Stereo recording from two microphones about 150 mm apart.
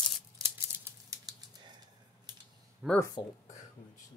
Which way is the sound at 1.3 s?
25° right (ahead or behind).